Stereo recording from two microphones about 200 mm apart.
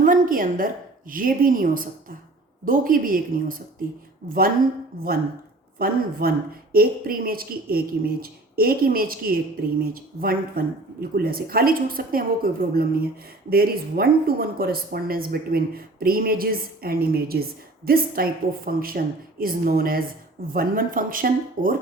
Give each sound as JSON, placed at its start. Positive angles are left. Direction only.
{"t": 0.0, "sound": "a sound", "side_deg": -45}
{"t": 1.1, "sound": "speech", "side_deg": -45}
{"t": 5.8, "sound": "speech", "side_deg": -45}